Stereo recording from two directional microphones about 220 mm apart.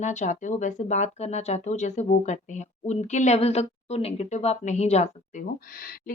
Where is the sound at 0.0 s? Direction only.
30° left (ahead or behind).